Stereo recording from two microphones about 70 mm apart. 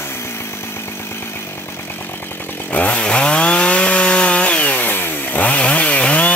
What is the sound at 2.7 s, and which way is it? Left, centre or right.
Chainsaw, left.